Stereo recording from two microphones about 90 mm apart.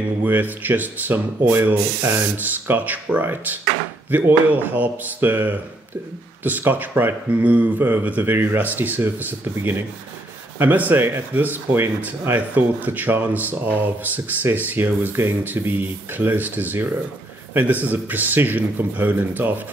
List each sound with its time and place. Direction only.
0.2 s speech: 20° right (ahead or behind)
17.8 s speech: 20° right (ahead or behind)